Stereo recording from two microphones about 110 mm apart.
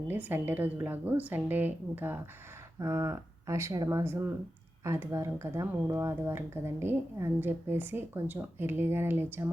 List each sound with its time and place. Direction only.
0.1 s a woman's voice: 15° right (ahead or behind)
2.8 s speech: 30° right (ahead or behind)